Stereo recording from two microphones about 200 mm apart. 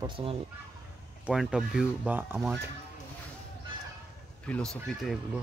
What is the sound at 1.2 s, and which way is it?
Speech, 5° right (ahead or behind).